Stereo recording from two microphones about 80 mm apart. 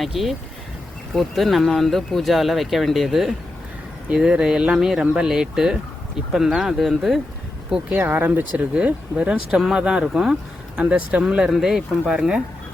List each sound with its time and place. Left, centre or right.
0.0 s speech: centre
7.7 s speech: right
9.5 s speech: centre